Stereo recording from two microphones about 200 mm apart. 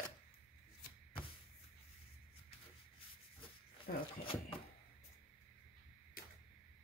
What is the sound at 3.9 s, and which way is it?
Speech, 45° left (ahead or behind).